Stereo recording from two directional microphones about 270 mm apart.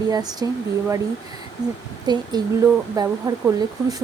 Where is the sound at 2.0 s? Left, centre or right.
Centre.